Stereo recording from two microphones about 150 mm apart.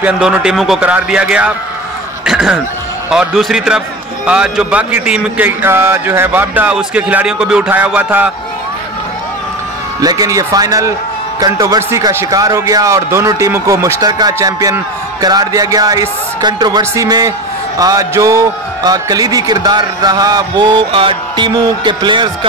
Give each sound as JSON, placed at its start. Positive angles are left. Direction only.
{"t": 0.0, "sound": "a man's voice", "side_deg": -5}
{"t": 2.2, "sound": "a sound", "side_deg": -5}
{"t": 3.1, "sound": "a man's voice", "side_deg": 0}
{"t": 9.9, "sound": "a man's voice", "side_deg": -25}